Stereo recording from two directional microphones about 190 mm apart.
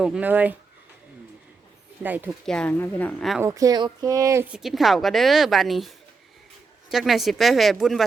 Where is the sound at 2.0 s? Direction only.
10° right (ahead or behind).